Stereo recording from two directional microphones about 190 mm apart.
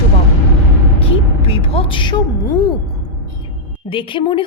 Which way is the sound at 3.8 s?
25° left (ahead or behind).